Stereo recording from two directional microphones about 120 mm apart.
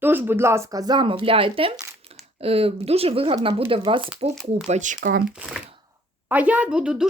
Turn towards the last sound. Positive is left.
turn(degrees=-10)  # may be behind; listen again after turning